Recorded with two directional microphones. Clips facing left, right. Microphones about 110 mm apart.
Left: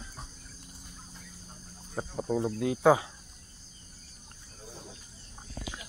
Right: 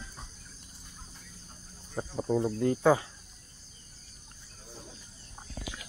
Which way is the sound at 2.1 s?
Centre (ahead or behind).